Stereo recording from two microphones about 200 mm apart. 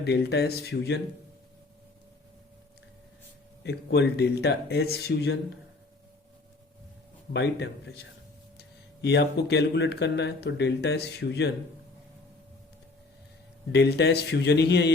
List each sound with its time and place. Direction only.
0.0 s speech: 55° left (ahead or behind)
3.6 s speech: 60° left (ahead or behind)
7.3 s speech: 60° left (ahead or behind)
13.7 s speech: 55° left (ahead or behind)